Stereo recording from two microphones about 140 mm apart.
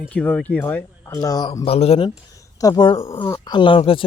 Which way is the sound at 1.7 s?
45° left (ahead or behind).